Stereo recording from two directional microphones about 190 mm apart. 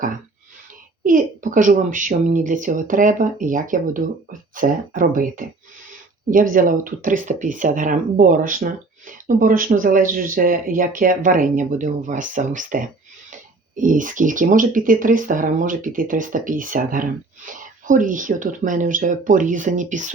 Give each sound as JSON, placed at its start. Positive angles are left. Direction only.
{"t": 1.0, "sound": "speech", "side_deg": -45}